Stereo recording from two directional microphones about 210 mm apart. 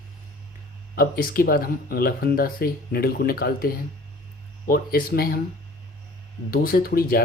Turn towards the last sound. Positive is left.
turn(degrees=45)  # may be behind; listen again after turning